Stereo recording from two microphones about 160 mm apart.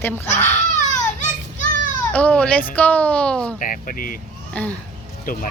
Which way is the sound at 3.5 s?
55° left (ahead or behind).